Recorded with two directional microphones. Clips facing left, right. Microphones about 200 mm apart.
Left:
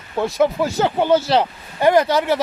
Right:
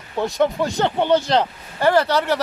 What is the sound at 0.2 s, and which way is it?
Speech, centre (ahead or behind).